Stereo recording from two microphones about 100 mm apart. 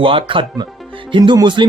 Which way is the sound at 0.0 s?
60° right (ahead or behind).